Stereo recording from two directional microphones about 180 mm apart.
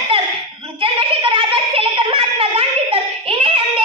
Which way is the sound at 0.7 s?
30° right (ahead or behind).